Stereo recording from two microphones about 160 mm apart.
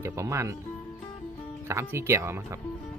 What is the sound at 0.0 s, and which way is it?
Speech, 15° right (ahead or behind).